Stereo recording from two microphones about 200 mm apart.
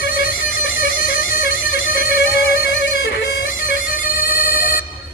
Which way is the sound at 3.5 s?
45° left (ahead or behind).